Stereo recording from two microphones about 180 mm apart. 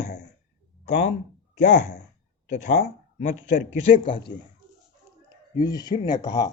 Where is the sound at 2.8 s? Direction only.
45° left (ahead or behind).